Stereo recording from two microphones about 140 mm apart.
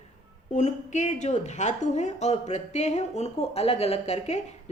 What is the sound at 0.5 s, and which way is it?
Speech, 55° left (ahead or behind).